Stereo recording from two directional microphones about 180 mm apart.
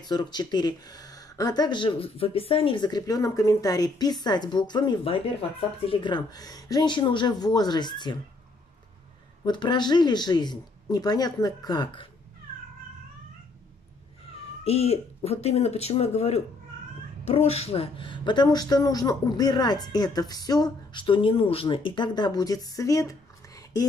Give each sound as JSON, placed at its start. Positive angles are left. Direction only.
{"t": 0.0, "sound": "speech", "side_deg": 25}
{"t": 9.4, "sound": "speech", "side_deg": 25}
{"t": 14.6, "sound": "speech", "side_deg": 35}